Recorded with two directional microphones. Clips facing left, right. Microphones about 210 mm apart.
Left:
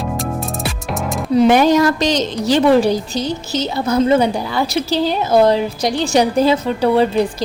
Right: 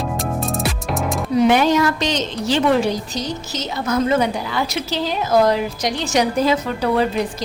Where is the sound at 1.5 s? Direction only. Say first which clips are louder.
Left 4 dB; 40° left (ahead or behind).